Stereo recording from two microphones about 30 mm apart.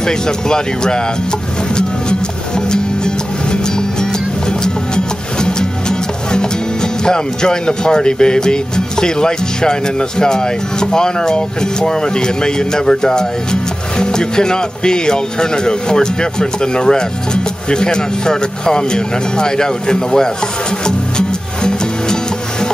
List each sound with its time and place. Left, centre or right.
0.0 s speech: left
4.0 s music: left